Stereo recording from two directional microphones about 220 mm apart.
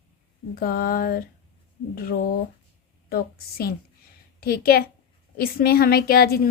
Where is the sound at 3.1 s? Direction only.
45° left (ahead or behind).